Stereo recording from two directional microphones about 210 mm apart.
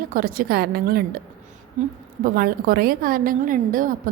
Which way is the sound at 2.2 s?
45° right (ahead or behind).